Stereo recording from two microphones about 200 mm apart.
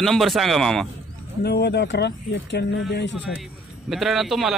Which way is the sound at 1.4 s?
55° left (ahead or behind).